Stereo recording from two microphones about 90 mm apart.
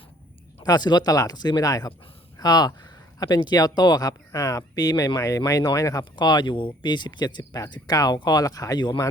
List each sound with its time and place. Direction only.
0.6 s speech: 50° left (ahead or behind)
4.3 s speech: 35° left (ahead or behind)